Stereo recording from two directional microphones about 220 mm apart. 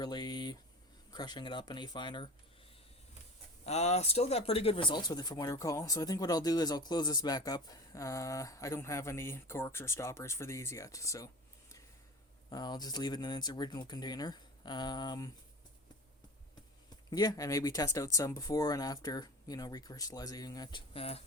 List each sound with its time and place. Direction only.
0.0 s speech: 20° left (ahead or behind)
3.7 s speech: 30° left (ahead or behind); by 11.3 s 15° left (ahead or behind)
12.5 s speech: 20° left (ahead or behind)
17.1 s speech: 15° left (ahead or behind)